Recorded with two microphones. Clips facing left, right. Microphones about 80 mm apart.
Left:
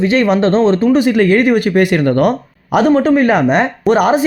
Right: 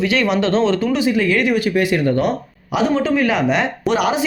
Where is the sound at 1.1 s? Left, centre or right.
Left.